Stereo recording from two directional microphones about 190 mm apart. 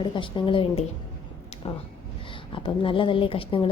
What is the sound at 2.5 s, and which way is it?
A woman's voice, 25° left (ahead or behind).